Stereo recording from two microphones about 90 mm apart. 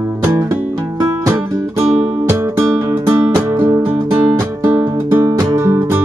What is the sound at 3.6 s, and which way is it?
Music, 25° right (ahead or behind).